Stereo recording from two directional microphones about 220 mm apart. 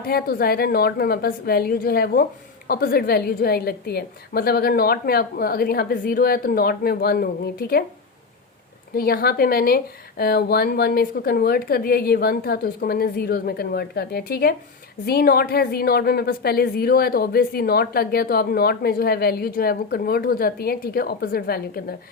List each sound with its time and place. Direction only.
0.0 s a woman's voice: 45° left (ahead or behind)
9.0 s a woman's voice: 45° left (ahead or behind)